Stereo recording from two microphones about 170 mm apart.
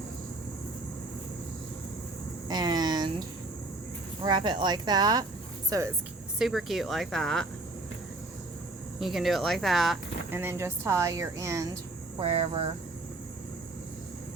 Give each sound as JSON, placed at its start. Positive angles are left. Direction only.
{"t": 2.5, "sound": "a sound", "side_deg": -25}
{"t": 4.2, "sound": "speech", "side_deg": -25}
{"t": 6.4, "sound": "speech", "side_deg": 0}
{"t": 9.0, "sound": "speech", "side_deg": 0}
{"t": 10.3, "sound": "a woman's voice", "side_deg": -15}
{"t": 12.2, "sound": "speech", "side_deg": -35}